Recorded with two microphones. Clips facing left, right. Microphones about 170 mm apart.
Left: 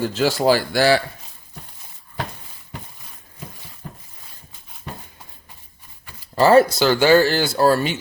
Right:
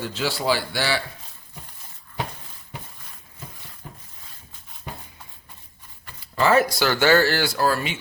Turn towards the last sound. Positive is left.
turn(degrees=35)  # may be behind; listen again after turning